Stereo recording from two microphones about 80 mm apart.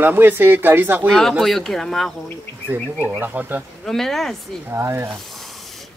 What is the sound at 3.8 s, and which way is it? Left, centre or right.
Speech, centre.